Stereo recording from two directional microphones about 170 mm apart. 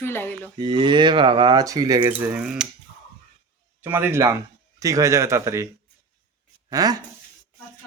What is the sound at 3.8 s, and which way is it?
A man's voice, 15° right (ahead or behind).